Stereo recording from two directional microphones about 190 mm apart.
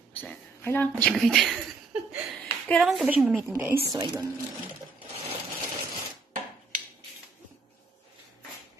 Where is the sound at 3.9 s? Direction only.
20° right (ahead or behind).